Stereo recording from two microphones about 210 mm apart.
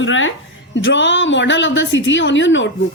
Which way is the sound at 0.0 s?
65° left (ahead or behind).